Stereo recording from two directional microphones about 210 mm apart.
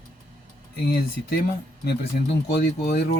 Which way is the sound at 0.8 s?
45° left (ahead or behind).